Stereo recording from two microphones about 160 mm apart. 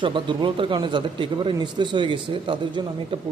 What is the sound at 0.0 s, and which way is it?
Speech, 30° right (ahead or behind).